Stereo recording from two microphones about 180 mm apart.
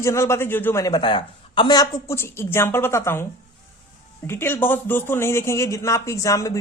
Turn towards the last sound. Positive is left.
turn(degrees=20)  # may be behind; listen again after turning